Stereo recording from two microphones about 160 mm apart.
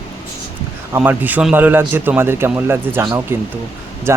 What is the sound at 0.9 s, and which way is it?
A man's voice, 10° right (ahead or behind).